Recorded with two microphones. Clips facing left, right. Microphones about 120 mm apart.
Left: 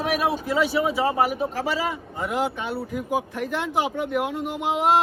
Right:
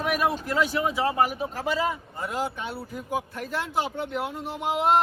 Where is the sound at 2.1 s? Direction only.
65° left (ahead or behind).